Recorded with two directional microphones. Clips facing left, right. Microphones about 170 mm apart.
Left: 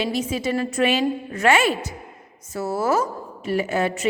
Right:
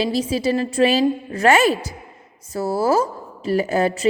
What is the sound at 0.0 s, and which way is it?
A woman's voice, 35° right (ahead or behind).